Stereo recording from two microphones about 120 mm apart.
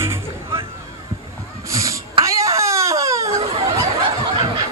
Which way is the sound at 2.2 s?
25° right (ahead or behind).